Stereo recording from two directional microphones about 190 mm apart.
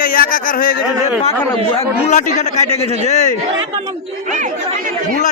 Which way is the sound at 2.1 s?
40° left (ahead or behind).